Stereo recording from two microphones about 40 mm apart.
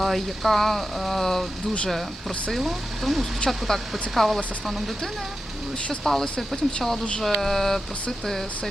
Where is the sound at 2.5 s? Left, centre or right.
Centre.